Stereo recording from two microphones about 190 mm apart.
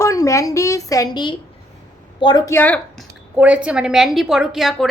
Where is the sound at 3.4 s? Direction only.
5° right (ahead or behind).